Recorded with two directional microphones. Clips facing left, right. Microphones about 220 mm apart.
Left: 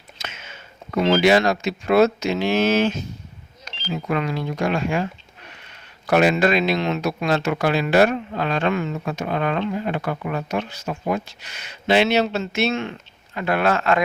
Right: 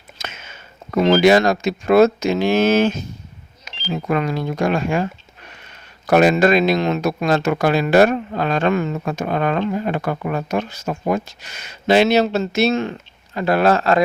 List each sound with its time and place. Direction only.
0.2 s speech: 45° right (ahead or behind)
6.1 s speech: 45° right (ahead or behind)